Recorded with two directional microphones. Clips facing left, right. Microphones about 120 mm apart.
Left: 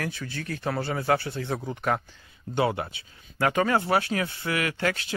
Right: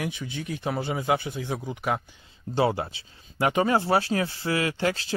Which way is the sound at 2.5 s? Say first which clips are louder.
Right 1 dB; 30° right (ahead or behind).